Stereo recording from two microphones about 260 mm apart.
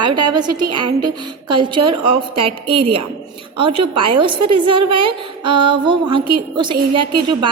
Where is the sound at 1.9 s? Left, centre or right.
Centre.